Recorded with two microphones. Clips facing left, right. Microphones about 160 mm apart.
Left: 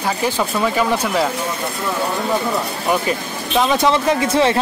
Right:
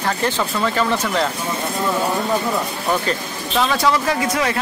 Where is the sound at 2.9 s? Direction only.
15° left (ahead or behind).